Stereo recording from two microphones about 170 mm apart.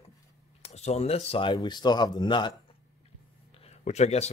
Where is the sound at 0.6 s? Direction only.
40° left (ahead or behind).